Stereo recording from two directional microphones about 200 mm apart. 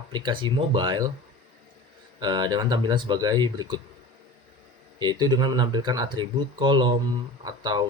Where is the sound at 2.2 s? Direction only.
20° right (ahead or behind).